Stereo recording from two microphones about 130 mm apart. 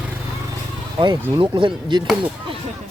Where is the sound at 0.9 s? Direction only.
35° right (ahead or behind).